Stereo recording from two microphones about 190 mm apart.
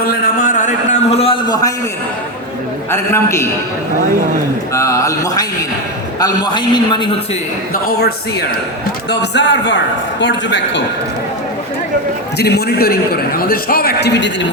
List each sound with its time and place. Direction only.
0.0 s a sound: 50° left (ahead or behind); by 1.5 s 30° left (ahead or behind)
2.9 s speech: 15° left (ahead or behind)
4.7 s a man's voice: 15° left (ahead or behind)
7.7 s a man's voice: 55° left (ahead or behind); by 10.8 s 70° left (ahead or behind)
12.4 s a man's voice: 60° left (ahead or behind)